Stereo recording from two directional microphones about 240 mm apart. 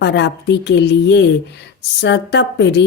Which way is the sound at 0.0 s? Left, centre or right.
Left.